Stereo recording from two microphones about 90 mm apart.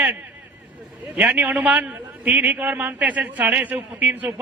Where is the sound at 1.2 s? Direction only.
20° right (ahead or behind).